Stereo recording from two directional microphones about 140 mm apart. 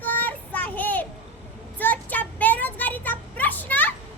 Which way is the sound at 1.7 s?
10° left (ahead or behind).